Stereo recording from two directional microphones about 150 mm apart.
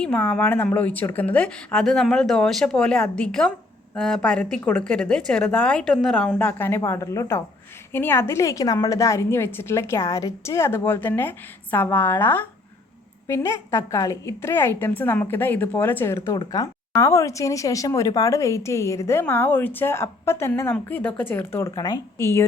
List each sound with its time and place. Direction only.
0.0 s a woman's voice: 10° left (ahead or behind)